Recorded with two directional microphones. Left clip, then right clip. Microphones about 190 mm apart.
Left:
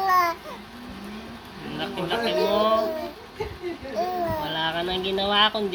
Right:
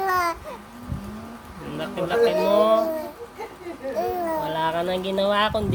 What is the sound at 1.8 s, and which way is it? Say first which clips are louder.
Speech: right 6 dB; 50° right (ahead or behind).